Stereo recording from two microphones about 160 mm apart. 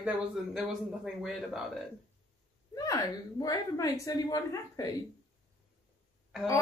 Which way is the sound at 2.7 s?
20° left (ahead or behind).